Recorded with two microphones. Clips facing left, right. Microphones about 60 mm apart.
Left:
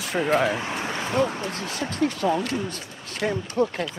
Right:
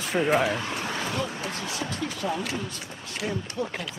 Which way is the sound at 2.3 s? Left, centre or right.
Centre.